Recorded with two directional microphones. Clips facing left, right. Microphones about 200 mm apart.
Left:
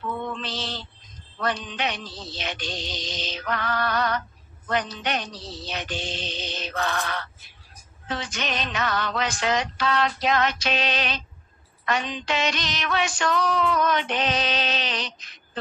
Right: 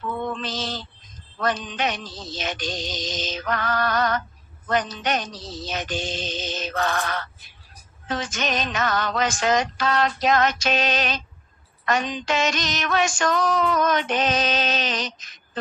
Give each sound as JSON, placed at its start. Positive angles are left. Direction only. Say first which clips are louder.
{"t": 0.3, "sound": "female singing", "louder": "right 3 dB", "side_deg": -45}